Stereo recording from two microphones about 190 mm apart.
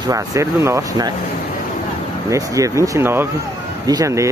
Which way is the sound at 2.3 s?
15° right (ahead or behind).